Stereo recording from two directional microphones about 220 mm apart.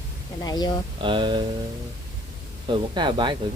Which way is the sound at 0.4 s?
20° left (ahead or behind).